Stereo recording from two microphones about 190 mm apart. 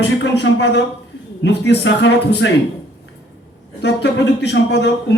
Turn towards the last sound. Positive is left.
turn(degrees=65)  # may be behind; listen again after turning